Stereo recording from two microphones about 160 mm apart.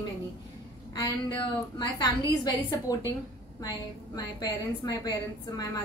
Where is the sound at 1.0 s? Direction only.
30° left (ahead or behind).